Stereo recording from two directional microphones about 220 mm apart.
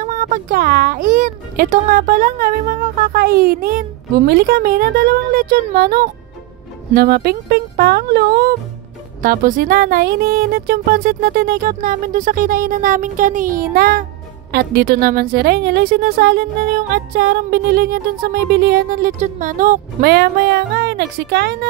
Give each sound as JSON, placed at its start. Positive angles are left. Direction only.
{"t": 0.0, "sound": "a woman's voice", "side_deg": -35}